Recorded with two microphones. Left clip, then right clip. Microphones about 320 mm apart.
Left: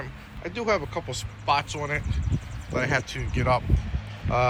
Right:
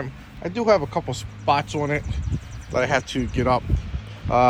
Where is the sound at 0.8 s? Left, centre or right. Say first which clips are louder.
Right 5 dB; right.